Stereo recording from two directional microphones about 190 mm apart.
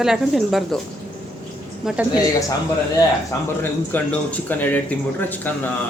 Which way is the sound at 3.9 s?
10° left (ahead or behind).